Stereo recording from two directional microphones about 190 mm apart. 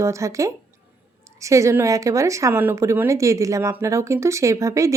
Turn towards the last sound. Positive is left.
turn(degrees=-15)  # may be behind; listen again after turning